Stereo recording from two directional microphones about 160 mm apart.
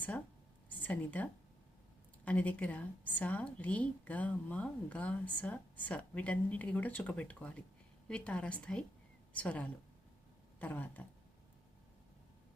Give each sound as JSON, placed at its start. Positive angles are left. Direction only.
{"t": 0.7, "sound": "a woman's voice", "side_deg": 10}